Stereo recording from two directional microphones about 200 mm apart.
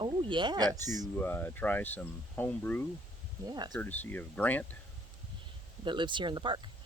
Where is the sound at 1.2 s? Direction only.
10° left (ahead or behind).